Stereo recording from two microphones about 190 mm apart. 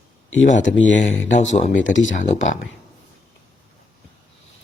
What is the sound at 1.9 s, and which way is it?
Speech, 80° left.